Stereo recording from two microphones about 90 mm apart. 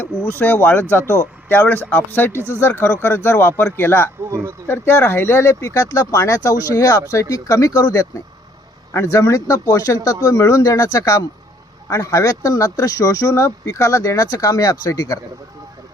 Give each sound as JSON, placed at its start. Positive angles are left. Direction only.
{"t": 0.0, "sound": "speech", "side_deg": 20}
{"t": 4.3, "sound": "speech", "side_deg": -30}
{"t": 4.7, "sound": "speech", "side_deg": 25}
{"t": 8.9, "sound": "speech", "side_deg": 30}